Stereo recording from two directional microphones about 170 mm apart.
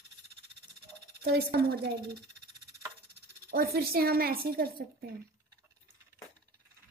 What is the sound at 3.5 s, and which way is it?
A woman's voice, 65° right (ahead or behind).